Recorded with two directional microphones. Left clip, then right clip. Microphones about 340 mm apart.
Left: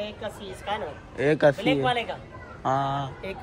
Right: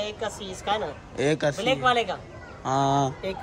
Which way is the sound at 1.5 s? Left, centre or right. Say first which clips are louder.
Right 2 dB; right.